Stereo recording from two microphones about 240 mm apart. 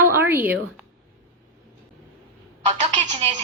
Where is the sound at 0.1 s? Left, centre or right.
Centre.